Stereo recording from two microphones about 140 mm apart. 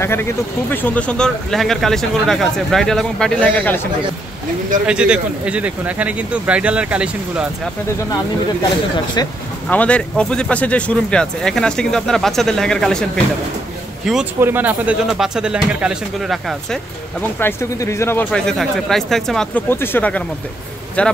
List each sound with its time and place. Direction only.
0.0 s speech: 15° left (ahead or behind)
4.8 s speech: 5° right (ahead or behind)
9.7 s speech: 10° left (ahead or behind)
14.4 s speech: 15° right (ahead or behind)
17.4 s speech: 20° left (ahead or behind)
18.3 s speech: 5° left (ahead or behind)
19.7 s speech: 15° left (ahead or behind)